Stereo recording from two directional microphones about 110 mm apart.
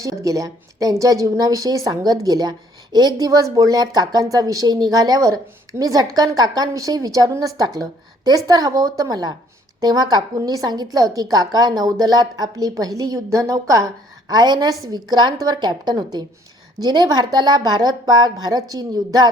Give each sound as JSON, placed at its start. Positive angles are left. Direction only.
{"t": 0.0, "sound": "a woman's voice", "side_deg": -30}